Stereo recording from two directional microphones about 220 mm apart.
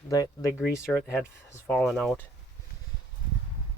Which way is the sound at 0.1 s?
15° left (ahead or behind).